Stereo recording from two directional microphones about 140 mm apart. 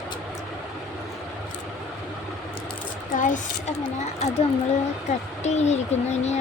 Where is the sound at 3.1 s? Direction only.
65° left (ahead or behind).